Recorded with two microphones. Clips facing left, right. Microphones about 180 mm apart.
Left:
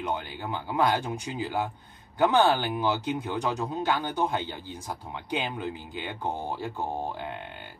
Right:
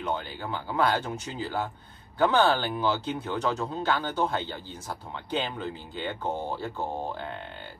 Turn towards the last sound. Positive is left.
turn(degrees=15)  # may be behind; listen again after turning